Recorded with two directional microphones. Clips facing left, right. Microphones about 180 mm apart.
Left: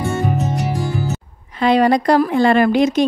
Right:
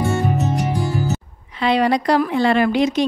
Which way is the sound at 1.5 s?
45° left (ahead or behind).